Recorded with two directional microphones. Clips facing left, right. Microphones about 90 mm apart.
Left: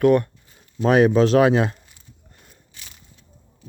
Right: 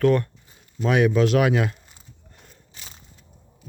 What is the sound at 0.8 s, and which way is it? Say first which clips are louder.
Speech: left 4 dB; 35° left (ahead or behind).